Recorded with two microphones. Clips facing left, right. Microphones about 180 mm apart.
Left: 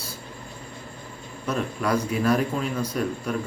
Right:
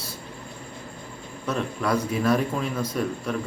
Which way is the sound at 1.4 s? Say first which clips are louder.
Even; centre (ahead or behind).